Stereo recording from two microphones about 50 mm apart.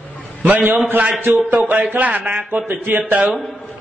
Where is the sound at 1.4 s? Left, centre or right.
Right.